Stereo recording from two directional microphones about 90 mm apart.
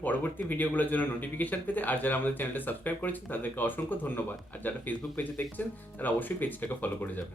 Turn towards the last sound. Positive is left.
turn(degrees=20)  # may be behind; listen again after turning